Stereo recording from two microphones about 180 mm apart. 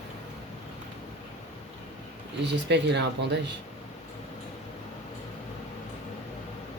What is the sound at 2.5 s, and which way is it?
Speech, 75° right (ahead or behind).